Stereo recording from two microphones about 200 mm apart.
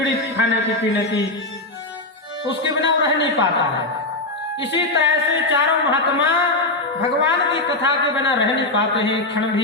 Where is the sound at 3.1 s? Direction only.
60° left (ahead or behind).